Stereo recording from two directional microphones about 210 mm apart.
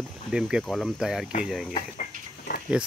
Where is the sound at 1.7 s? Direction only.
40° left (ahead or behind).